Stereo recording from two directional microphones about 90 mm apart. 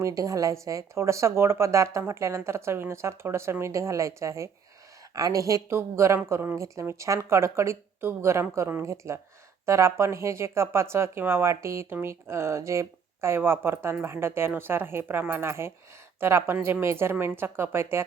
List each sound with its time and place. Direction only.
0.0 s speech: 40° right (ahead or behind)